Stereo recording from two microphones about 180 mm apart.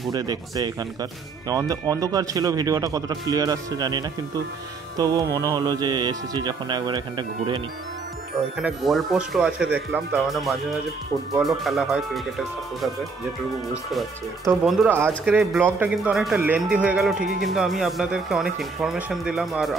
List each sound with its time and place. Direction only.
0.1 s speech: 20° right (ahead or behind)
8.5 s speech: centre (ahead or behind)
14.6 s speech: 5° right (ahead or behind)
17.2 s speech: 60° right (ahead or behind)
17.6 s speech: centre (ahead or behind)